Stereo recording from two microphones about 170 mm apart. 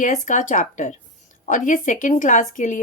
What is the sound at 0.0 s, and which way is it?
Speech, 45° left (ahead or behind).